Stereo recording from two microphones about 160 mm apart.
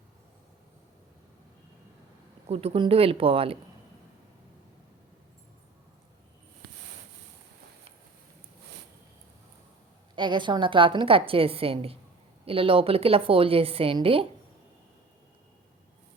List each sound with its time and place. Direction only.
2.5 s a woman's voice: 40° right (ahead or behind)
10.2 s a woman's voice: 30° right (ahead or behind)